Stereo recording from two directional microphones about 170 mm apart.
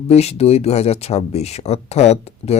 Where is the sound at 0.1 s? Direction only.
40° left (ahead or behind).